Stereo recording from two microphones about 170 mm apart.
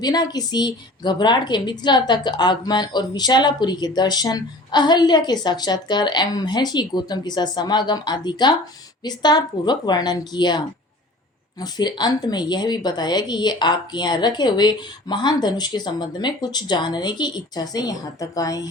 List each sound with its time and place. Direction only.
0.0 s a woman's voice: 25° left (ahead or behind)
11.6 s a woman's voice: 25° left (ahead or behind)